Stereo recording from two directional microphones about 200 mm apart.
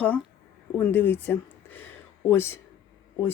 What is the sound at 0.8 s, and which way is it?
Speech, 10° left (ahead or behind).